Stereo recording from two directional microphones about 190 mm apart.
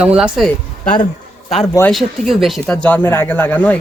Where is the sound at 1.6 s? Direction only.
15° left (ahead or behind).